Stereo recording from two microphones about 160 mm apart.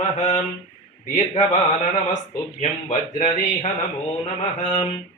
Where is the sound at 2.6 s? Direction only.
50° left (ahead or behind).